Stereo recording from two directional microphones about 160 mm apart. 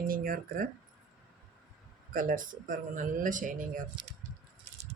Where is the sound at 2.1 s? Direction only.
60° right (ahead or behind).